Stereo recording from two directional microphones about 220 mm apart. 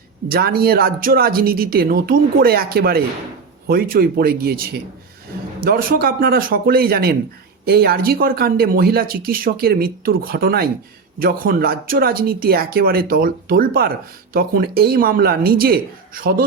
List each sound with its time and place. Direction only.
0.3 s speech: 45° right (ahead or behind)